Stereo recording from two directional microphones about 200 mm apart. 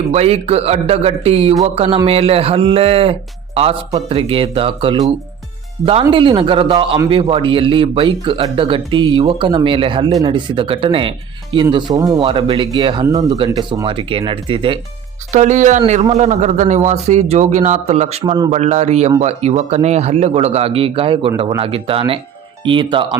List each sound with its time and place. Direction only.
0.1 s a man's voice: 30° right (ahead or behind)
15.3 s a man's voice: 35° right (ahead or behind)